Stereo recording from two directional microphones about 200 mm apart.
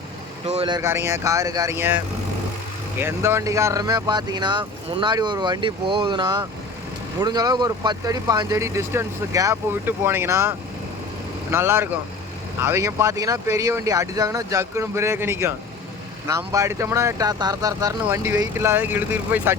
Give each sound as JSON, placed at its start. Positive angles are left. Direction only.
{"t": 0.4, "sound": "speech", "side_deg": -30}
{"t": 0.8, "sound": "speech", "side_deg": -15}
{"t": 3.0, "sound": "speech", "side_deg": -10}
{"t": 11.5, "sound": "speech", "side_deg": -10}